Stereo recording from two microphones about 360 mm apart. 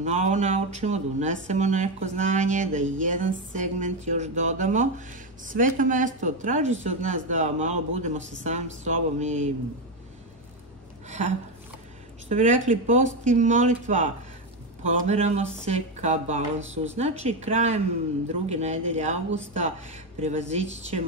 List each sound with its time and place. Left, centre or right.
0.0 s speech: centre
11.1 s speech: centre
20.2 s speech: centre